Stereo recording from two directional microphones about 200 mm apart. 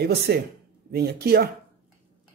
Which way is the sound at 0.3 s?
55° right (ahead or behind).